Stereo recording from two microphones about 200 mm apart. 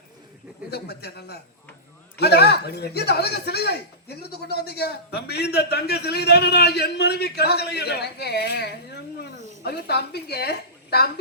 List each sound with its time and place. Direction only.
0.7 s a man's voice: 55° left (ahead or behind)